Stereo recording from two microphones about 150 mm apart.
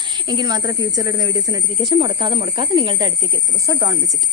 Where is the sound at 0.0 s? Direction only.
30° right (ahead or behind).